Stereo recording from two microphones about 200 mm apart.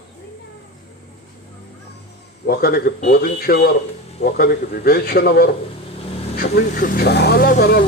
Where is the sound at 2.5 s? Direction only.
50° left (ahead or behind).